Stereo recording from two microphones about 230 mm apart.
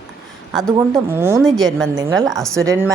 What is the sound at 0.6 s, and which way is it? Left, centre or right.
Speech, centre.